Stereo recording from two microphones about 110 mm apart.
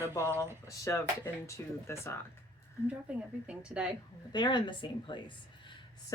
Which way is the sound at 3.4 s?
10° right (ahead or behind).